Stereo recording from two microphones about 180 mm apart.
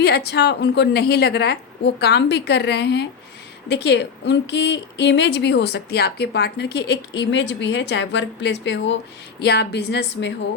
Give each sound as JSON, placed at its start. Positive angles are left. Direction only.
{"t": 0.0, "sound": "a woman's voice", "side_deg": 65}
{"t": 9.4, "sound": "a woman's voice", "side_deg": 65}